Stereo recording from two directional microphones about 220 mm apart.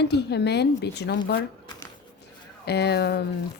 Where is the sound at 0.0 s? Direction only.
50° left (ahead or behind).